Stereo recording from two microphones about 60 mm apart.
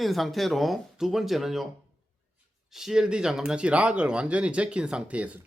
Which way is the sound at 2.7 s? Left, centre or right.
Centre.